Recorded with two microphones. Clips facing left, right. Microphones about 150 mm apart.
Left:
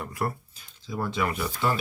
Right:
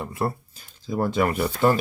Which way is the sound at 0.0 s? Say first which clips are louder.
Right 4 dB; 25° right (ahead or behind).